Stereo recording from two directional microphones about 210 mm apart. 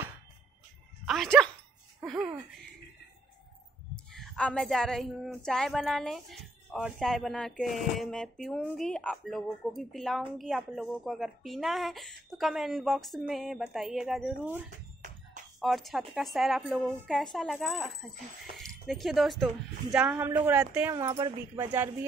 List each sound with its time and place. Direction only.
1.0 s speech: centre (ahead or behind)
3.9 s a woman's voice: 5° left (ahead or behind)
15.0 s music: 35° right (ahead or behind)
15.6 s a woman's voice: centre (ahead or behind)